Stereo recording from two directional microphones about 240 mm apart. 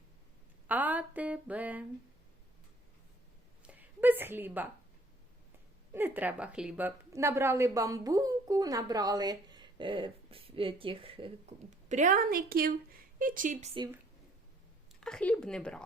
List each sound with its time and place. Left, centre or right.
0.7 s a woman's voice: centre
3.7 s a woman's voice: centre
5.9 s a woman's voice: centre; by 13.7 s right
13.7 s a woman's voice: centre
15.0 s speech: centre